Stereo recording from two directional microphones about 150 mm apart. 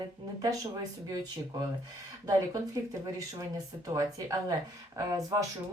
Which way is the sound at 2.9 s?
20° right (ahead or behind).